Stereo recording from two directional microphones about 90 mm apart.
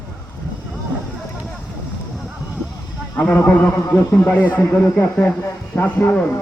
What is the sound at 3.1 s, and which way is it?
Speech, 15° left (ahead or behind).